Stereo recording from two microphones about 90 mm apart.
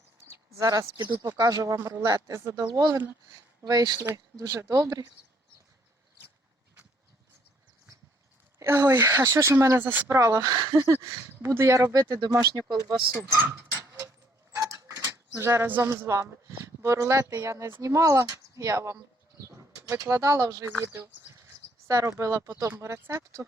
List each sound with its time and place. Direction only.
0.3 s speech: 40° right (ahead or behind)
2.6 s speech: 45° right (ahead or behind)
3.9 s speech: 25° right (ahead or behind)
4.4 s speech: 35° right (ahead or behind)
8.6 s speech: 25° right (ahead or behind)
10.2 s speech: 35° right (ahead or behind)
13.1 s speech: 25° right (ahead or behind)
13.7 s a sound: 40° right (ahead or behind)
15.4 s speech: 25° right (ahead or behind)
21.8 s speech: 35° right (ahead or behind)